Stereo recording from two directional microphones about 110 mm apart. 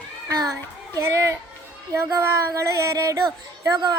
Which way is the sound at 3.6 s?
45° right (ahead or behind).